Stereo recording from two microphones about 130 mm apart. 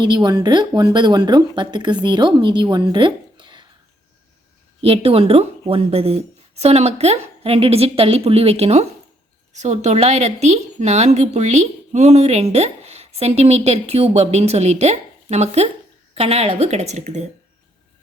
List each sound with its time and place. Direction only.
0.0 s speech: 35° right (ahead or behind)
4.8 s a woman's voice: 50° right (ahead or behind); by 17.2 s 65° right (ahead or behind)